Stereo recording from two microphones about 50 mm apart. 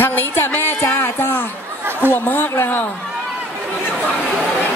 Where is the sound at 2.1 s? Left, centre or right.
Left.